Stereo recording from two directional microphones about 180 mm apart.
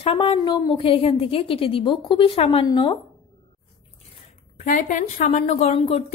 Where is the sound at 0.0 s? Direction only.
30° left (ahead or behind).